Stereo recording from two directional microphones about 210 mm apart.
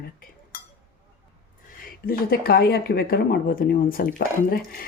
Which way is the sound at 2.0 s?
45° left (ahead or behind).